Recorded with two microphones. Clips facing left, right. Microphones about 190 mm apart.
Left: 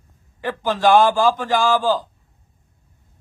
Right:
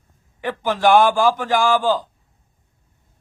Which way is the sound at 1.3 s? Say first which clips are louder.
Even; 15° right (ahead or behind).